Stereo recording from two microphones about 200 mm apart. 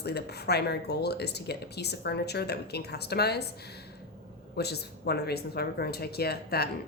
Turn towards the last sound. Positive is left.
turn(degrees=50)  # may be behind; listen again after turning